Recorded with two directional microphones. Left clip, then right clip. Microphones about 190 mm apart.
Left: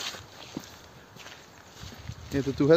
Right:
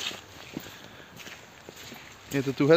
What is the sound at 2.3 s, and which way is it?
Speech, 5° left (ahead or behind).